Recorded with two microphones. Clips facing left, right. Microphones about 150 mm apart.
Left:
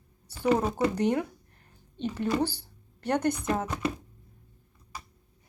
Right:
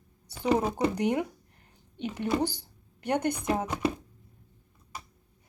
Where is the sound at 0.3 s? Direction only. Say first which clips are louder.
Left 1 dB; 15° right (ahead or behind).